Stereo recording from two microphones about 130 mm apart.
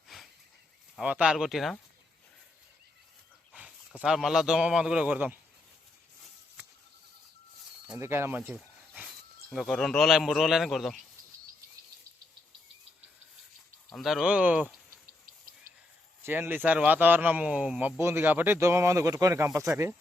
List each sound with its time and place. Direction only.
0.1 s dog: centre (ahead or behind)
0.9 s a man's voice: 5° right (ahead or behind)
4.0 s a man's voice: 5° right (ahead or behind)
7.9 s speech: 20° right (ahead or behind)
9.5 s a man's voice: centre (ahead or behind)
13.9 s a man's voice: centre (ahead or behind)
16.2 s speech: 15° right (ahead or behind)